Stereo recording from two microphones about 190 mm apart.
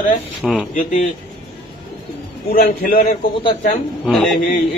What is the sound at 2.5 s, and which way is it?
Speech, 50° left (ahead or behind).